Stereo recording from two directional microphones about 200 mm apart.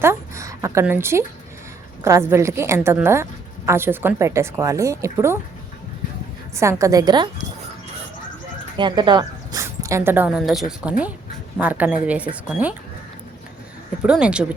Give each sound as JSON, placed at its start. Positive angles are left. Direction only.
{"t": 0.0, "sound": "a woman's voice", "side_deg": -15}
{"t": 6.6, "sound": "a woman's voice", "side_deg": -15}
{"t": 8.7, "sound": "a woman's voice", "side_deg": -25}
{"t": 14.0, "sound": "speech", "side_deg": -5}